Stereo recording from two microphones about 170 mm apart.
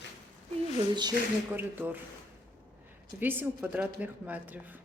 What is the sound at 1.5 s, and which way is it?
Speech, 10° right (ahead or behind).